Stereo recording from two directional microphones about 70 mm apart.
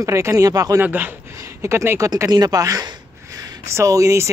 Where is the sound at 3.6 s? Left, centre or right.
Right.